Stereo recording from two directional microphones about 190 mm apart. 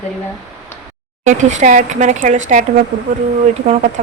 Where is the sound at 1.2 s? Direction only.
40° right (ahead or behind).